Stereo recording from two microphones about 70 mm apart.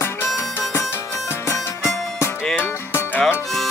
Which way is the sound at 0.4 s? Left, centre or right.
Left.